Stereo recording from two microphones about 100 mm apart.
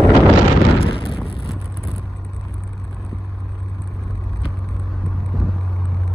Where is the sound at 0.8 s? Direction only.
65° left (ahead or behind).